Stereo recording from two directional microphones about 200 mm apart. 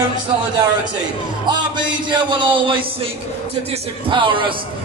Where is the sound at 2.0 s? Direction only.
25° right (ahead or behind).